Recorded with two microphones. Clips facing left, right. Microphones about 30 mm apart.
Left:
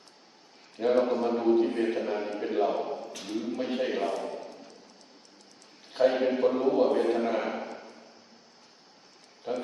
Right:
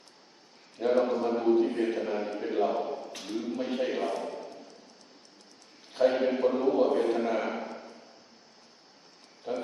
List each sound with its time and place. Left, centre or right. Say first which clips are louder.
0.8 s a man's voice: left 1 dB; centre
6.1 s a man's voice: left 1 dB; centre
9.5 s speech: left 1 dB; left